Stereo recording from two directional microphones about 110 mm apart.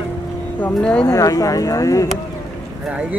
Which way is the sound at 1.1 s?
30° left (ahead or behind).